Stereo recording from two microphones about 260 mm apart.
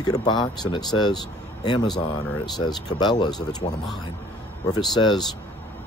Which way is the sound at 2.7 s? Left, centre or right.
Centre.